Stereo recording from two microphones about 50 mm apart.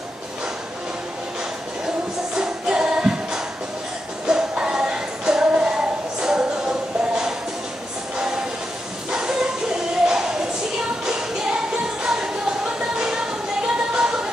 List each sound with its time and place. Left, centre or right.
2.3 s music: centre
4.3 s music: centre
9.1 s bow-wow: centre
10.0 s a sound: centre
11.1 s music: centre